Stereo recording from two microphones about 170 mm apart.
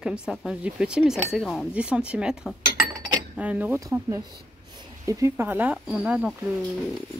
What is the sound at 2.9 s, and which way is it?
Cutlery, 25° right (ahead or behind).